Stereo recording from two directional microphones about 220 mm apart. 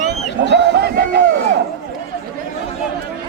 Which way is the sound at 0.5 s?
50° right (ahead or behind).